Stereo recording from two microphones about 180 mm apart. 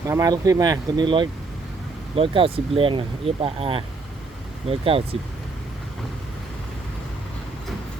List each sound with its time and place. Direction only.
0.1 s speech: 20° right (ahead or behind)